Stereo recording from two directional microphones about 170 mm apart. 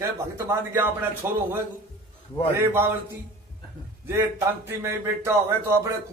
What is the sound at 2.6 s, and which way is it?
Speech, 15° right (ahead or behind).